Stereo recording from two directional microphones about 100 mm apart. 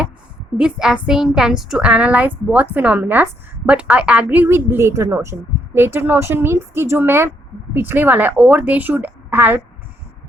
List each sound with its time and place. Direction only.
0.5 s a woman's voice: 5° right (ahead or behind)